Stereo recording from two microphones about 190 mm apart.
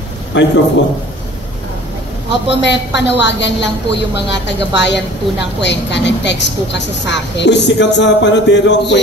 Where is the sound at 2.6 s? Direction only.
65° left (ahead or behind).